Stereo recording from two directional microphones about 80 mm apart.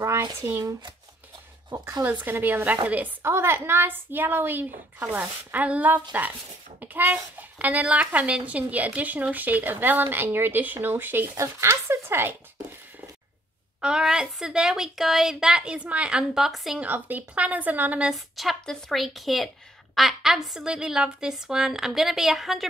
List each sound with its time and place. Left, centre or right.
0.5 s speech: right
2.0 s a child's voice: right
3.3 s a child's voice: right
13.7 s a woman's voice: centre
16.8 s a child's voice: right
18.1 s a woman's voice: centre